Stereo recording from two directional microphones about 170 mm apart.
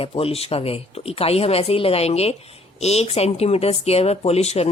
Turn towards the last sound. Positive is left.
turn(degrees=40)  # may be behind; listen again after turning